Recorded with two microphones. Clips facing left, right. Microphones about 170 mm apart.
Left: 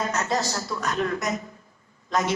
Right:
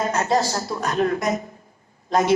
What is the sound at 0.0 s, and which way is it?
A man's voice, 35° right (ahead or behind).